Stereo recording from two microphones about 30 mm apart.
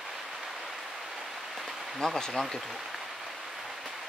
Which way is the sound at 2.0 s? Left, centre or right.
Left.